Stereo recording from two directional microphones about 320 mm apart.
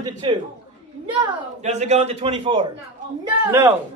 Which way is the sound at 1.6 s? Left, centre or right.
Right.